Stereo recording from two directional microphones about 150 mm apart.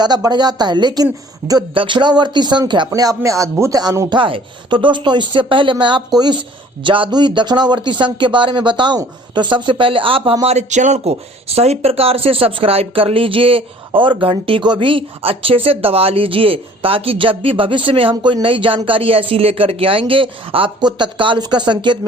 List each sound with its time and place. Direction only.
0.0 s a man's voice: 30° right (ahead or behind)
10.4 s speech: 45° right (ahead or behind); by 21.9 s 30° right (ahead or behind)